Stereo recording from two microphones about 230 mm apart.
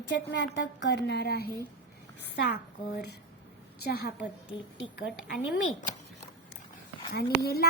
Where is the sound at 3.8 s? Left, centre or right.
Left.